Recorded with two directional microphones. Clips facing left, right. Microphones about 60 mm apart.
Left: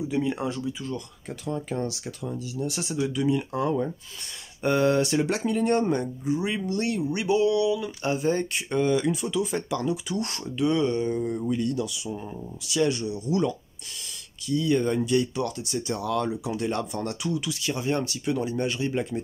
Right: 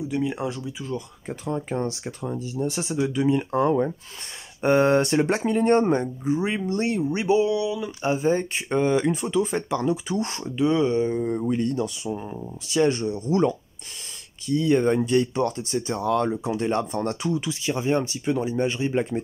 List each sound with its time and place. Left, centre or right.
0.1 s speech: centre
1.2 s speech: right
14.5 s speech: right